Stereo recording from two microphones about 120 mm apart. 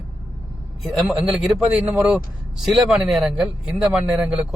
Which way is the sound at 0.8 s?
5° right (ahead or behind).